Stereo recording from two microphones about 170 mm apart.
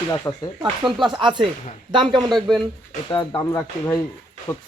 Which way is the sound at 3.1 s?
25° left (ahead or behind).